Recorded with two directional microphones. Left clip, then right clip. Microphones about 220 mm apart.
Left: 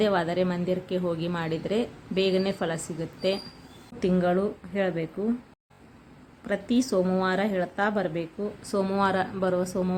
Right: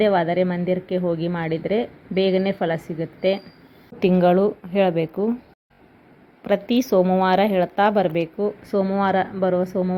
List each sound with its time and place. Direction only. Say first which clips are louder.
0.0 s a woman's voice: right 6 dB; 10° right (ahead or behind)
6.4 s a woman's voice: right 7 dB; 15° right (ahead or behind)